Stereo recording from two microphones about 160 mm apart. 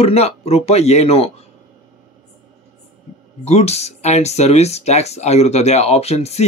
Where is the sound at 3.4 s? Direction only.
40° left (ahead or behind).